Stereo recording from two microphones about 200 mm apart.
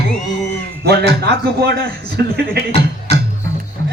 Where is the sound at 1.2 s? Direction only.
55° right (ahead or behind).